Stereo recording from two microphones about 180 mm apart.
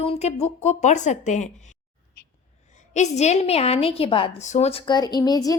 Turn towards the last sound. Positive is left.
turn(degrees=20)  # may be behind; listen again after turning